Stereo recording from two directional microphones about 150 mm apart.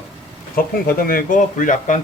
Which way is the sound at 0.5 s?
75° left (ahead or behind).